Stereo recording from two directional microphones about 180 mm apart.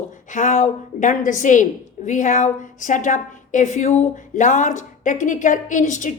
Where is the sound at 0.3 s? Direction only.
45° left (ahead or behind).